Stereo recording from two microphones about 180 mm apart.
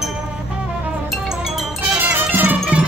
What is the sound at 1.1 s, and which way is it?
Music, centre (ahead or behind).